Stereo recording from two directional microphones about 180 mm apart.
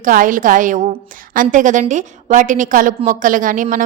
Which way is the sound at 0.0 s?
50° right (ahead or behind).